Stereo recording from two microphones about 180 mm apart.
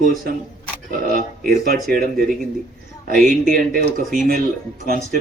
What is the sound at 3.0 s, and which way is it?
Speech, 50° right (ahead or behind).